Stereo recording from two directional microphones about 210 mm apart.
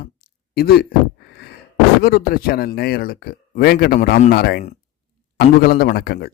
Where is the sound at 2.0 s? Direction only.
45° left (ahead or behind).